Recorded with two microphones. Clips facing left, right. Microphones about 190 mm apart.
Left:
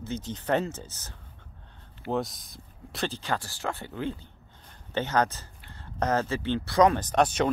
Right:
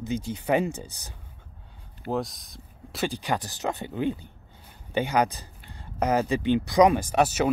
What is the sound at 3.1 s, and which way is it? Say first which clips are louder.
Speech: right 3 dB; 15° right (ahead or behind).